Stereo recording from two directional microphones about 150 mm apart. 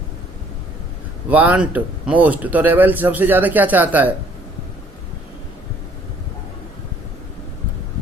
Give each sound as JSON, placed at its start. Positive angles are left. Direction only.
{"t": 1.3, "sound": "speech", "side_deg": -10}